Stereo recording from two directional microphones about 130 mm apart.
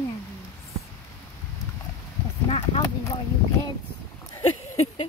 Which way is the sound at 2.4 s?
45° left (ahead or behind).